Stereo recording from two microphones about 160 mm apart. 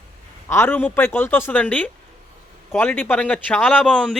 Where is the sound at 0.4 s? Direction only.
15° left (ahead or behind).